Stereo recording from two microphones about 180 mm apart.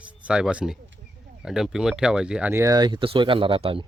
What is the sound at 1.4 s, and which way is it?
Speech, centre (ahead or behind).